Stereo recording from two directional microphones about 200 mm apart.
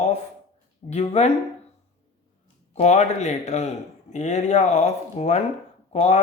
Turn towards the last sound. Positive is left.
turn(degrees=30)  # may be behind; listen again after turning